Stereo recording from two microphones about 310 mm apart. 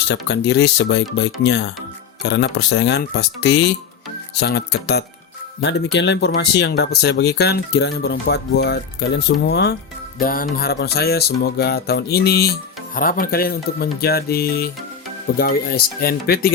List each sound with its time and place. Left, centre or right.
0.1 s speech: left